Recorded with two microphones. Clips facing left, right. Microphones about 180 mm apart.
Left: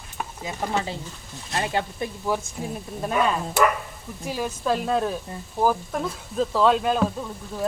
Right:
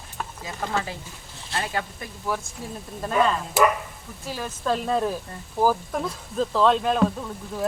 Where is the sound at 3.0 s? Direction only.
10° left (ahead or behind).